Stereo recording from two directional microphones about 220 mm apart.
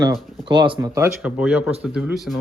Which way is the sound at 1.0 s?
5° right (ahead or behind).